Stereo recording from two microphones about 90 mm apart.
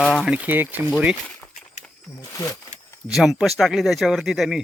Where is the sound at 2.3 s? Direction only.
40° left (ahead or behind).